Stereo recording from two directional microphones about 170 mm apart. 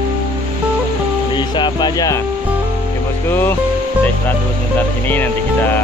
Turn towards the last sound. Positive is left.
turn(degrees=10)  # may be behind; listen again after turning